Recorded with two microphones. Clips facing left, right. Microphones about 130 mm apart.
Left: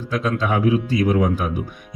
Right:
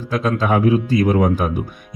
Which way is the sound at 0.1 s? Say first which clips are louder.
Right 3 dB; 45° right (ahead or behind).